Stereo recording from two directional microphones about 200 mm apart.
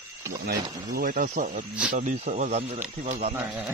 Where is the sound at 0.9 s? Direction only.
45° right (ahead or behind).